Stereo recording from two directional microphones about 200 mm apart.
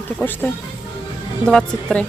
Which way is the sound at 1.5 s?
Centre (ahead or behind).